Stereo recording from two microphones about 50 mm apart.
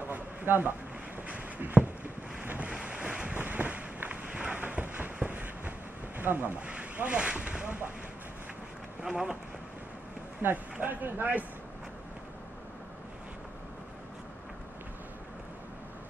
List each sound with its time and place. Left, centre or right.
0.1 s a sound: right
2.6 s boat: right
3.3 s a sound: right
6.1 s speech: right
6.6 s speech: right
9.0 s speech: centre
10.4 s speech: right